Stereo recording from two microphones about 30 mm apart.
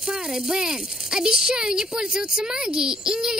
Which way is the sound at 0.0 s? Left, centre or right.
Centre.